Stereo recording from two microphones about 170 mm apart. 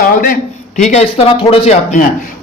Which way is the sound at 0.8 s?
40° left (ahead or behind).